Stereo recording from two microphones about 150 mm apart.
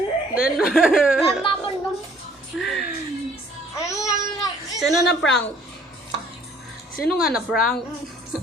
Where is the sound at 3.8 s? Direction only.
20° left (ahead or behind).